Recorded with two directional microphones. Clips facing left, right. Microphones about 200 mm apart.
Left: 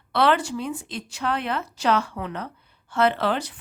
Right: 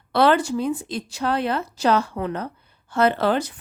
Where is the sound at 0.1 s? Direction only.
40° right (ahead or behind).